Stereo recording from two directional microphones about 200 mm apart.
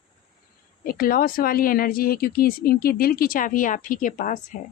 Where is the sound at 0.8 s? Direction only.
45° left (ahead or behind).